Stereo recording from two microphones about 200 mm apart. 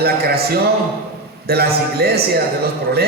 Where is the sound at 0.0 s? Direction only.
50° right (ahead or behind).